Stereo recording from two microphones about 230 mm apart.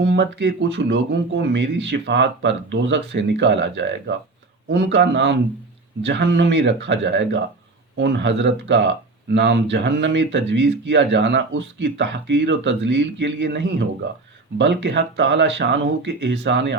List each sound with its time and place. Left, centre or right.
0.0 s speech: right